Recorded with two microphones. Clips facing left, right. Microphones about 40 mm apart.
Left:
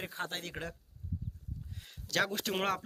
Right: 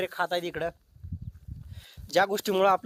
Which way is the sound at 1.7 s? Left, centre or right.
Centre.